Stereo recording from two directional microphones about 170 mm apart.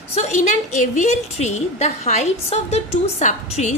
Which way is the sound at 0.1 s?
45° left (ahead or behind).